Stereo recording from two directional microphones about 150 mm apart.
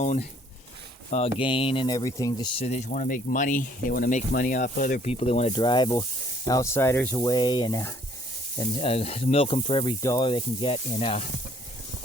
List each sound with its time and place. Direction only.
0.0 s speech: 50° left (ahead or behind)
1.4 s speech: 35° left (ahead or behind)
1.9 s speech: 20° left (ahead or behind)
2.6 s speech: 45° left (ahead or behind); by 4.9 s 60° left (ahead or behind)
5.0 s speech: 45° left (ahead or behind)
5.5 s speech: 30° left (ahead or behind)
8.5 s speech: 35° left (ahead or behind)
10.0 s speech: 20° left (ahead or behind)
10.2 s speech: 35° left (ahead or behind)